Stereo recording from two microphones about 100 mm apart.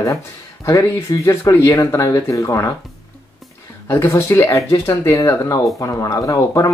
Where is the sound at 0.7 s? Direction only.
30° left (ahead or behind).